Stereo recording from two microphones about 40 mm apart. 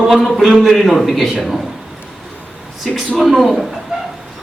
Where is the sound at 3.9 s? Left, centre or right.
Centre.